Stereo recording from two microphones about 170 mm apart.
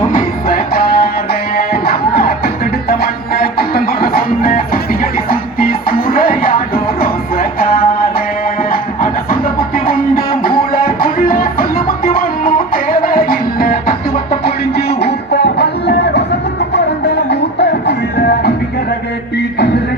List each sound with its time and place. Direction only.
0.0 s music: 55° left (ahead or behind)
15.0 s music: 75° left (ahead or behind)
17.2 s music: 80° left